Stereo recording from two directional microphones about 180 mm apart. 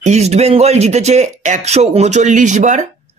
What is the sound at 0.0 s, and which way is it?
Speech, 40° right (ahead or behind).